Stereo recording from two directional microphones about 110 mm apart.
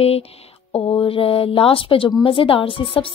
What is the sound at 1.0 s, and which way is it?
A woman's voice, 55° left (ahead or behind).